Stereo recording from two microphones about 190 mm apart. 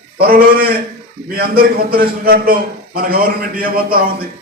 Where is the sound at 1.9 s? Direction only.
50° right (ahead or behind).